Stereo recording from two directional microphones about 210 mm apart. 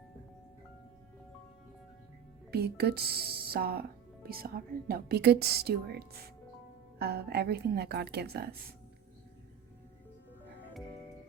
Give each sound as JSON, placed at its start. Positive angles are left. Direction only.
{"t": 2.5, "sound": "speech", "side_deg": -50}